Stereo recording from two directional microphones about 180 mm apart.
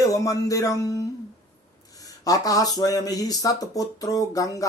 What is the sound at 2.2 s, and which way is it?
Speech, 20° left (ahead or behind).